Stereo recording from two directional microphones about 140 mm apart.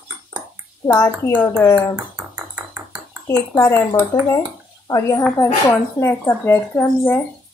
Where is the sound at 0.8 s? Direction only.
15° left (ahead or behind).